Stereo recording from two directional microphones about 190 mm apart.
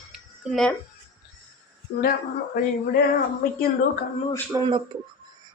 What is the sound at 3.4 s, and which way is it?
Speech, 50° left (ahead or behind).